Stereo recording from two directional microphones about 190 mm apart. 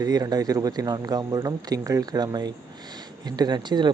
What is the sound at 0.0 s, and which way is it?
Speech, 20° right (ahead or behind).